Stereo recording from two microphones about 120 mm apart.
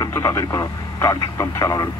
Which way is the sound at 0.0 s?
30° left (ahead or behind).